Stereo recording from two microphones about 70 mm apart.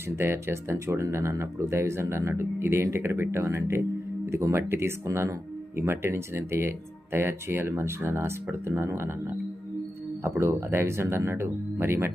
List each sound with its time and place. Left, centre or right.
0.2 s speech: right
10.2 s speech: right